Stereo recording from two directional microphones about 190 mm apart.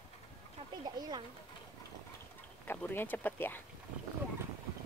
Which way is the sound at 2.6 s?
10° left (ahead or behind).